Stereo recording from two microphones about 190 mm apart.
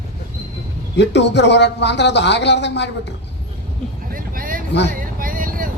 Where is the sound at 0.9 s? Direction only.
65° left (ahead or behind).